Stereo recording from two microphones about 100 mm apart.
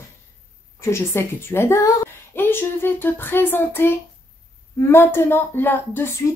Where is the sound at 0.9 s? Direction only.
25° left (ahead or behind).